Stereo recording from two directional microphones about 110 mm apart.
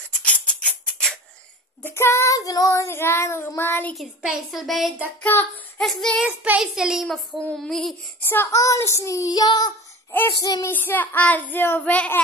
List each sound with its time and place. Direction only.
0.2 s music: 10° left (ahead or behind)
1.8 s child singing: 20° left (ahead or behind)
3.9 s a child's voice: 5° right (ahead or behind)
5.2 s child singing: 15° left (ahead or behind)
5.8 s a child's voice: 5° left (ahead or behind)
6.2 s a child's voice: 15° right (ahead or behind); by 7.9 s 5° left (ahead or behind)
8.2 s child singing: 20° left (ahead or behind)
8.5 s child singing: 30° left (ahead or behind)
10.6 s child singing: 20° left (ahead or behind)